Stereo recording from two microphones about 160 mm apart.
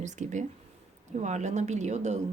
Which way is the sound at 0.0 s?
50° right (ahead or behind).